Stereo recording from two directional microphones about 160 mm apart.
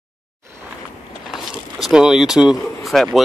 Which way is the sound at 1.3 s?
Centre (ahead or behind).